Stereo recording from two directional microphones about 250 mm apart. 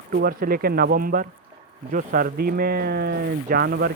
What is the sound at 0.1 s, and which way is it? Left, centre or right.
Speech, right.